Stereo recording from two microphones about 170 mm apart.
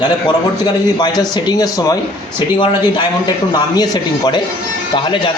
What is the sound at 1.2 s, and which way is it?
A man's voice, 25° left (ahead or behind).